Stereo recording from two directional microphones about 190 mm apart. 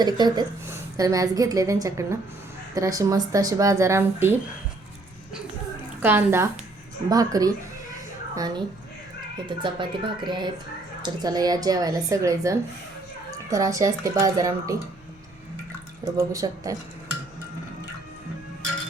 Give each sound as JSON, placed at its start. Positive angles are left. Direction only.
{"t": 0.0, "sound": "a woman's voice", "side_deg": -20}
{"t": 6.0, "sound": "a woman's voice", "side_deg": -10}
{"t": 16.1, "sound": "a woman's voice", "side_deg": -15}